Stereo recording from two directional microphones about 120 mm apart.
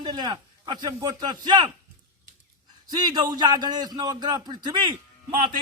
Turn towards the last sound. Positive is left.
turn(degrees=-40)  # may be behind; listen again after turning